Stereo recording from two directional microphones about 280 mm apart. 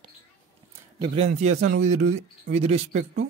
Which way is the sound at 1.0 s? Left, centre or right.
Right.